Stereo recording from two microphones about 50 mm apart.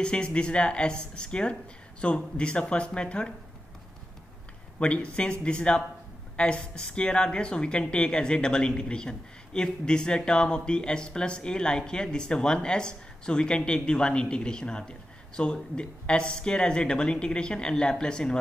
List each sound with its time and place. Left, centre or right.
0.0 s speech: centre
4.7 s speech: left